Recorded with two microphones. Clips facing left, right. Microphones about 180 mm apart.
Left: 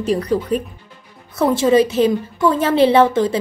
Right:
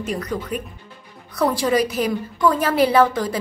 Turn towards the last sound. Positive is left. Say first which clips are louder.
# left 4 dB
turn(degrees=25)  # may be behind; listen again after turning